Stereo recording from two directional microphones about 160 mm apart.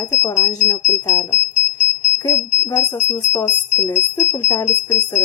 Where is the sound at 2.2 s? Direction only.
15° left (ahead or behind).